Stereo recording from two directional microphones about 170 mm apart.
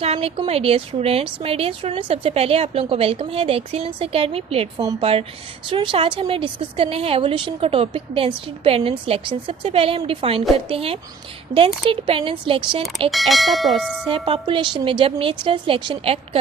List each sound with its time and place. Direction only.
0.0 s speech: 35° right (ahead or behind)
13.1 s speech: centre (ahead or behind)
14.1 s speech: 30° right (ahead or behind)